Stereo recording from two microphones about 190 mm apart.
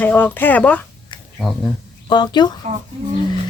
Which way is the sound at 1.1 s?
25° left (ahead or behind).